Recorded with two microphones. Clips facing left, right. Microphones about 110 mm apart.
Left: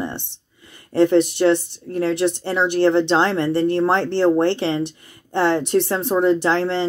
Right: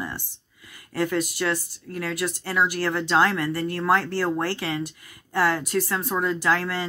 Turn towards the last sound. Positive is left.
turn(degrees=25)  # may be behind; listen again after turning